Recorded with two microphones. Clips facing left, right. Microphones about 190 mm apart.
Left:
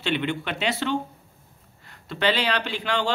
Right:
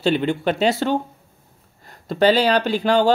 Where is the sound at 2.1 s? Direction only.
40° right (ahead or behind).